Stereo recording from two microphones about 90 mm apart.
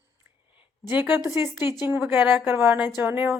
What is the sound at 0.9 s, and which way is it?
A woman's voice, 15° right (ahead or behind).